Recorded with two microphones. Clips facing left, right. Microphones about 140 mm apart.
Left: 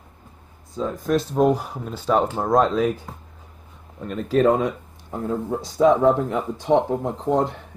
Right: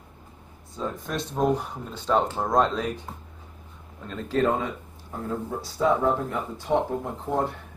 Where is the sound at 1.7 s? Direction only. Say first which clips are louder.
Left 3 dB; 10° left (ahead or behind).